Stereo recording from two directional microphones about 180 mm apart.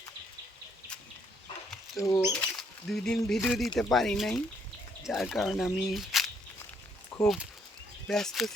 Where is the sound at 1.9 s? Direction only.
15° left (ahead or behind).